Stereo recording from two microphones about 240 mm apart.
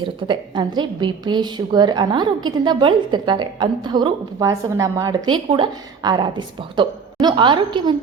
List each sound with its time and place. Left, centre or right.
0.0 s a woman's voice: centre